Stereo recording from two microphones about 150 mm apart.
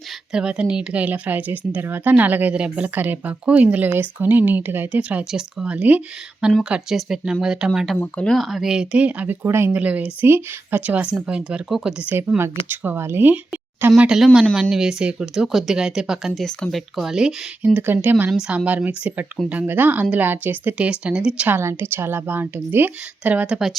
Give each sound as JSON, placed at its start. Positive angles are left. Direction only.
{"t": 0.3, "sound": "speech", "side_deg": -5}
{"t": 7.9, "sound": "speech", "side_deg": 10}
{"t": 14.5, "sound": "speech", "side_deg": -5}